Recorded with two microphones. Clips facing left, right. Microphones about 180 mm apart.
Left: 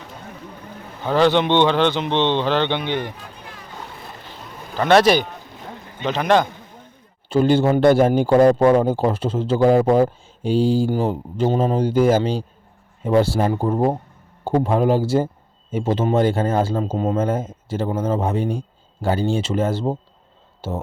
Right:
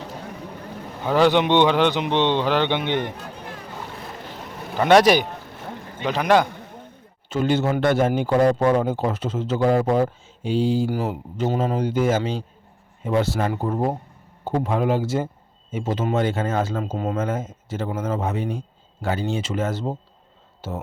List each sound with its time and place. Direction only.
1.0 s speech: 10° right (ahead or behind)
4.7 s speech: 10° right (ahead or behind)
7.3 s speech: 35° left (ahead or behind)